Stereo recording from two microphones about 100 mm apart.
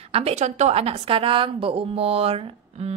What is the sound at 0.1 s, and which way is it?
A woman's voice, 90° right.